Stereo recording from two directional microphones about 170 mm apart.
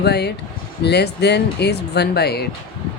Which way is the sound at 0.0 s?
75° left (ahead or behind).